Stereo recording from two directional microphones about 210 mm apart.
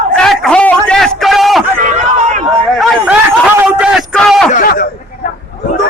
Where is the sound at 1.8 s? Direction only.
35° right (ahead or behind).